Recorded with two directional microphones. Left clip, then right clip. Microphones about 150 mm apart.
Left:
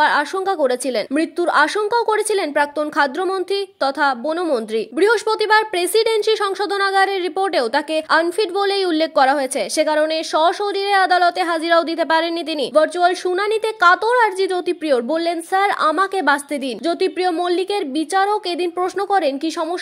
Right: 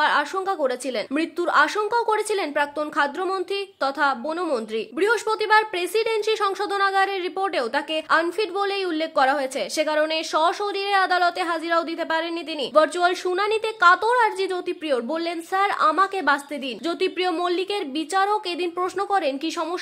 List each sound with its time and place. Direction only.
0.0 s a woman's voice: 25° left (ahead or behind)
12.7 s a woman's voice: 20° left (ahead or behind)